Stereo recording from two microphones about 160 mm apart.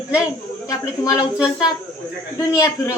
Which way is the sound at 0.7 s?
20° left (ahead or behind).